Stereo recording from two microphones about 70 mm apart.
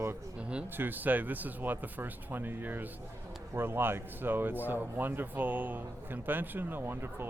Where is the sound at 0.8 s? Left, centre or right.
Right.